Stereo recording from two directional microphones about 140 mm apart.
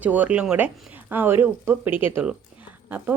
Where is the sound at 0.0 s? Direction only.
10° right (ahead or behind).